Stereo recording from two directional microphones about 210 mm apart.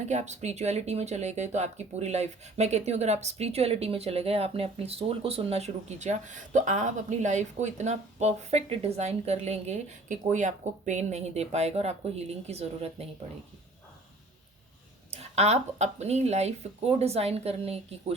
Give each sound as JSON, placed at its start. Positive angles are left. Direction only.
{"t": 0.0, "sound": "speech", "side_deg": -35}
{"t": 15.1, "sound": "speech", "side_deg": -30}